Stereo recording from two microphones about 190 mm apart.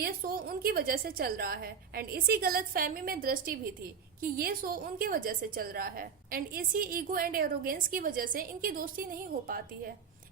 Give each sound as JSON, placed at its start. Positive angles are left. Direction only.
{"t": 0.0, "sound": "a woman's voice", "side_deg": -50}